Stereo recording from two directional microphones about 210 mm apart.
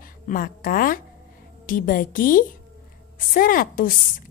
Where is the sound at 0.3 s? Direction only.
45° left (ahead or behind).